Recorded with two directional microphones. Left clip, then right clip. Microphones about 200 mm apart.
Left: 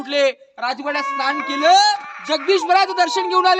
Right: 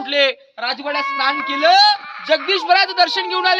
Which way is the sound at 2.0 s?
45° right (ahead or behind).